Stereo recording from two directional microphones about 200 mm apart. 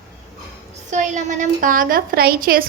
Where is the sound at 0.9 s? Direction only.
40° right (ahead or behind).